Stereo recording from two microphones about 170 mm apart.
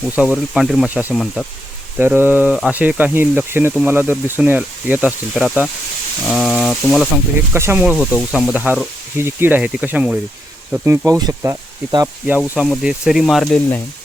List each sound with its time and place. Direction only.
0.2 s speech: 5° right (ahead or behind)
2.0 s speech: 10° right (ahead or behind)
7.5 s speech: 15° right (ahead or behind)
12.5 s speech: centre (ahead or behind)